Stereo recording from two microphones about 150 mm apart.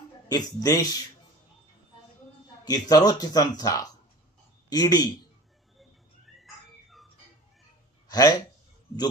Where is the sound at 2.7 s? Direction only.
25° left (ahead or behind).